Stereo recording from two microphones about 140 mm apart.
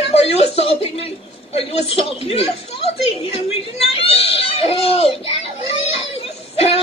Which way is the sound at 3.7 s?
45° left (ahead or behind).